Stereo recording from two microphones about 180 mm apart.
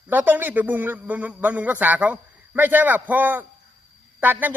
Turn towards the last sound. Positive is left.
turn(degrees=-10)  # may be behind; listen again after turning